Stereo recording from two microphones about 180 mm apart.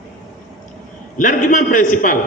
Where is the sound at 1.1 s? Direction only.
45° left (ahead or behind).